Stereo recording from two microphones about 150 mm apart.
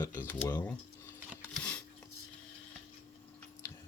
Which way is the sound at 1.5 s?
5° left (ahead or behind).